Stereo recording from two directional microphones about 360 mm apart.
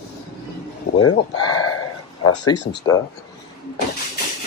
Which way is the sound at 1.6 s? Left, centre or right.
Left.